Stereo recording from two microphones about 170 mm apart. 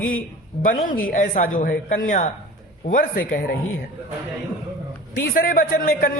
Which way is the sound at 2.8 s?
55° left (ahead or behind).